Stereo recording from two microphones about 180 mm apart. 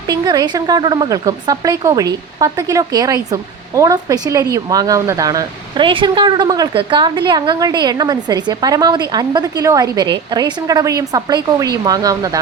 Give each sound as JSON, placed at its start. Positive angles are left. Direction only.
{"t": 0.1, "sound": "speech", "side_deg": -25}